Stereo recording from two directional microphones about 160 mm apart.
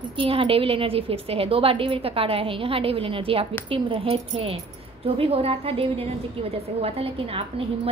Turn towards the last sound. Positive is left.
turn(degrees=-35)  # may be behind; listen again after turning